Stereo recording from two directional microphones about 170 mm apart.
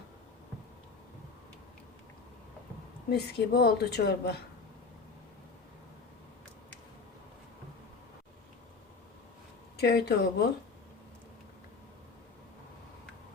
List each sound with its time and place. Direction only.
3.1 s speech: 70° left (ahead or behind)
9.7 s speech: 70° left (ahead or behind)